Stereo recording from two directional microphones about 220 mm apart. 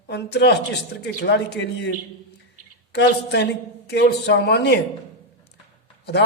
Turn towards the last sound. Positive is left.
turn(degrees=50)  # may be behind; listen again after turning